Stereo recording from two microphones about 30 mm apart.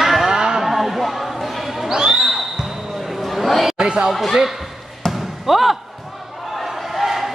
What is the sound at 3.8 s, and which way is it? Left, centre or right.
Speech, right.